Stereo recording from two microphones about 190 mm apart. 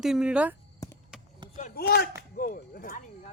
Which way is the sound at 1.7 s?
55° left (ahead or behind).